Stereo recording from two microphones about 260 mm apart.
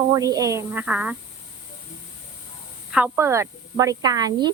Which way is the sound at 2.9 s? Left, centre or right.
Centre.